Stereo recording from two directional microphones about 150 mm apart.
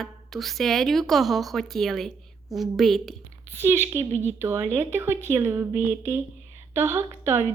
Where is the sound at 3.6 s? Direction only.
15° right (ahead or behind).